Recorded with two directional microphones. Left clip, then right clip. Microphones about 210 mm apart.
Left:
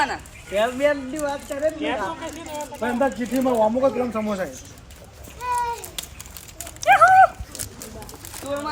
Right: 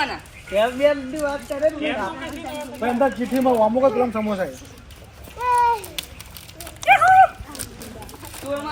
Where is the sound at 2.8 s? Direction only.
10° right (ahead or behind).